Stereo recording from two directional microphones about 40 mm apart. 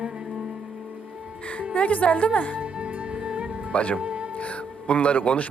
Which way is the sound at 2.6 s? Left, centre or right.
Right.